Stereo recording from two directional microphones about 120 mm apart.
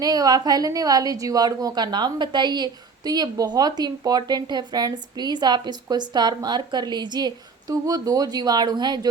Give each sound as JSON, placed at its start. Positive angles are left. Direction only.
{"t": 0.0, "sound": "a woman's voice", "side_deg": -30}